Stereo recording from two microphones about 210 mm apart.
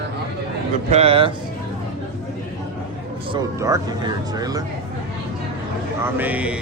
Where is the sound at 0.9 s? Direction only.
30° right (ahead or behind).